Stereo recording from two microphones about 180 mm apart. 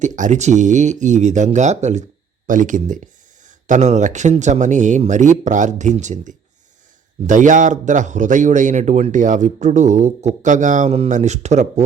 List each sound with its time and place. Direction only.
0.0 s speech: 40° right (ahead or behind)